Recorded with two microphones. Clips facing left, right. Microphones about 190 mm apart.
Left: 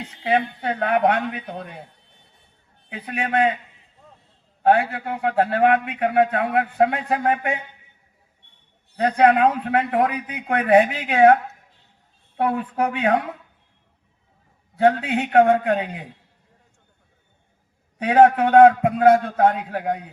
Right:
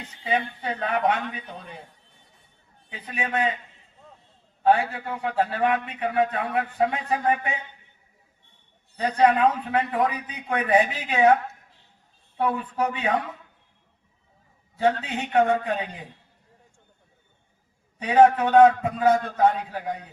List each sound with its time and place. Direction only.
0.2 s a man's voice: 65° left (ahead or behind)
2.9 s a man's voice: 60° left (ahead or behind)
4.6 s a man's voice: 60° left (ahead or behind)
9.0 s a man's voice: 60° left (ahead or behind)
12.4 s a man's voice: 60° left (ahead or behind)
15.0 s a man's voice: 60° left (ahead or behind)
18.0 s a man's voice: 60° left (ahead or behind)